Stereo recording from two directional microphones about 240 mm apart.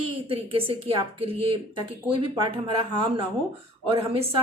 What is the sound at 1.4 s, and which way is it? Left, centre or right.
Speech, right.